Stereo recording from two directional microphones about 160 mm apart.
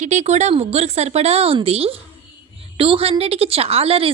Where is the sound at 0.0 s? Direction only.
45° right (ahead or behind).